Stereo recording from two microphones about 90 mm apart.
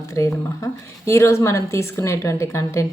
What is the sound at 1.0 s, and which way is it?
A woman's voice, 30° left (ahead or behind).